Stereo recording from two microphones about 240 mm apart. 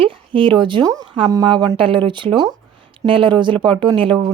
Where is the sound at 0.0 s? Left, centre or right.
Right.